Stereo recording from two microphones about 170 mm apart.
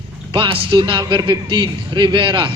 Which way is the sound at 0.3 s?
30° right (ahead or behind).